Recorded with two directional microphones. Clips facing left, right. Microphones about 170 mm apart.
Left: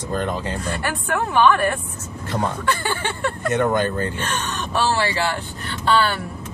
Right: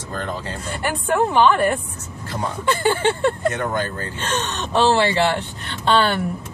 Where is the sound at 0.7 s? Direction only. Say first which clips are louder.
Right 6 dB; 20° right (ahead or behind).